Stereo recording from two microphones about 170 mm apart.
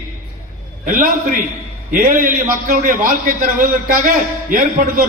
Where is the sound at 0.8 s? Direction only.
55° right (ahead or behind).